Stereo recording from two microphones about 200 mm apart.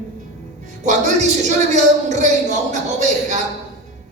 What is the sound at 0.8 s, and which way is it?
Speech, 35° right (ahead or behind).